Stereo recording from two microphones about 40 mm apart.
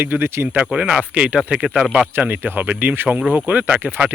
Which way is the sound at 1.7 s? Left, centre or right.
Centre.